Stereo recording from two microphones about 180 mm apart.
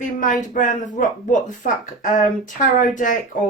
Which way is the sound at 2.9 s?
45° left (ahead or behind).